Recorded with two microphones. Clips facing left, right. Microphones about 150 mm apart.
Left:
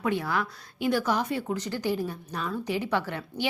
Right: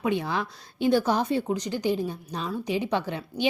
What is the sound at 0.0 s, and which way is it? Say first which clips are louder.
A woman's voice: right 1 dB; 20° right (ahead or behind).